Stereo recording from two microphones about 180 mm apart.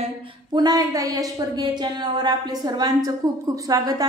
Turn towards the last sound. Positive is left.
turn(degrees=-20)  # may be behind; listen again after turning